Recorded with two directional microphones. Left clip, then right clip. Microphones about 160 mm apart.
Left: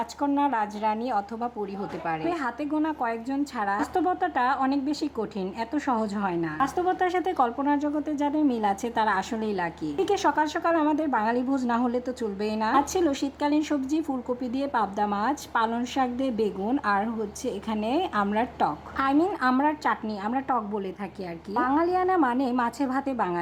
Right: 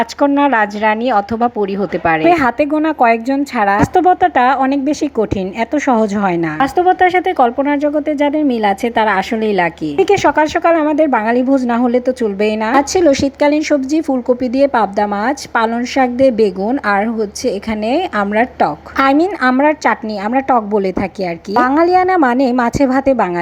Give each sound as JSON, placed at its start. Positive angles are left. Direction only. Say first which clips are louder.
{"t": 0.0, "sound": "speech", "louder": "right 13 dB", "side_deg": -20}
{"t": 6.6, "sound": "a woman's voice", "louder": "right 14 dB", "side_deg": -25}